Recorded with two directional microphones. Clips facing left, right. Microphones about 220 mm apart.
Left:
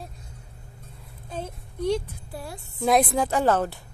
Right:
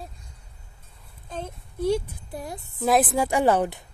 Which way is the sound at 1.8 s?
10° right (ahead or behind).